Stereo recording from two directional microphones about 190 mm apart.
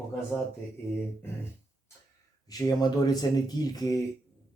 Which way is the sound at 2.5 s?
20° left (ahead or behind).